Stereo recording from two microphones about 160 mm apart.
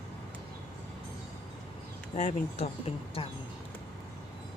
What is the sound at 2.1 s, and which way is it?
Speech, 45° left (ahead or behind).